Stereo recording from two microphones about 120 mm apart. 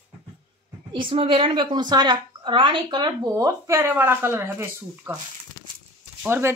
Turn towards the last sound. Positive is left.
turn(degrees=-20)  # may be behind; listen again after turning